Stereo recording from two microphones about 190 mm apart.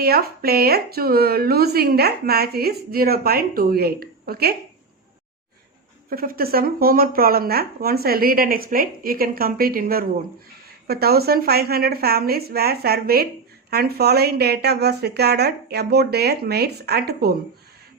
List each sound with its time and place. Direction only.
0.0 s a woman's voice: 55° right (ahead or behind)
6.1 s a woman's voice: 50° right (ahead or behind)